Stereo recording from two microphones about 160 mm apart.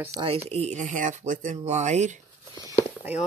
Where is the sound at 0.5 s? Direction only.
45° right (ahead or behind).